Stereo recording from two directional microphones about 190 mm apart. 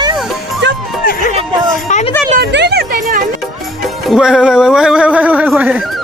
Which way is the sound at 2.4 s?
60° right (ahead or behind).